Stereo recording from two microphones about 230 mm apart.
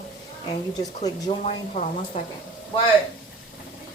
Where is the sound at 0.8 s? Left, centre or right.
Left.